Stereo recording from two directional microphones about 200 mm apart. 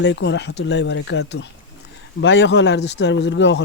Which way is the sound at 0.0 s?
60° left (ahead or behind).